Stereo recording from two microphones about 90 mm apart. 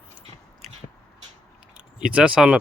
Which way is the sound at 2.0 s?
10° right (ahead or behind).